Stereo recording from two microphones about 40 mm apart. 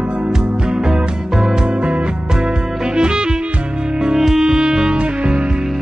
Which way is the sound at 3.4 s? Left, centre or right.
Right.